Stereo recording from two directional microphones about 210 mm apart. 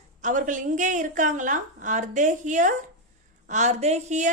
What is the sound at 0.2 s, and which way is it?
A woman's voice, 35° right (ahead or behind).